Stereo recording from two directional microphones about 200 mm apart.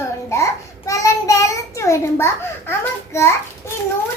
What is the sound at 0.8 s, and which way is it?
A child's voice, 15° left (ahead or behind).